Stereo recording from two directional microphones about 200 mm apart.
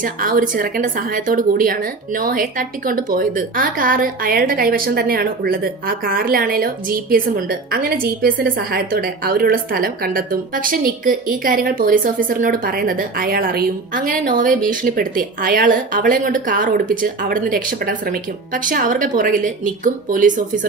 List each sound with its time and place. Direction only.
0.0 s speech: 45° right (ahead or behind)